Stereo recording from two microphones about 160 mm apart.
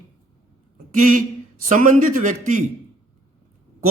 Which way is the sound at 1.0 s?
55° right (ahead or behind).